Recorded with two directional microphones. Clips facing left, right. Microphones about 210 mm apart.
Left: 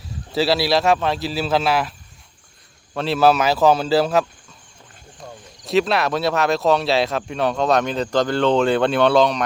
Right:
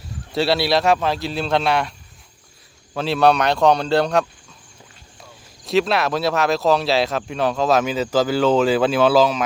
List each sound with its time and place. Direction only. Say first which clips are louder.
0.3 s speech: even; centre (ahead or behind)
5.6 s speech: even; centre (ahead or behind)